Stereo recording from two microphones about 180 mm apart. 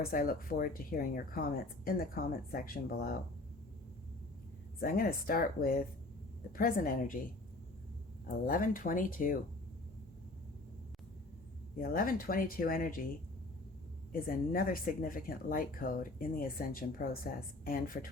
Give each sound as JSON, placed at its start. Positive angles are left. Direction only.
{"t": 0.0, "sound": "speech", "side_deg": 55}
{"t": 4.8, "sound": "speech", "side_deg": 55}
{"t": 8.4, "sound": "speech", "side_deg": 50}
{"t": 11.8, "sound": "speech", "side_deg": 55}
{"t": 14.1, "sound": "speech", "side_deg": 50}